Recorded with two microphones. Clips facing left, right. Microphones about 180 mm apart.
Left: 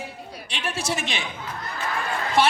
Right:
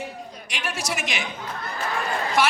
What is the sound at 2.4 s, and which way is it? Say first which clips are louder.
Speech: left 2 dB; 30° left (ahead or behind).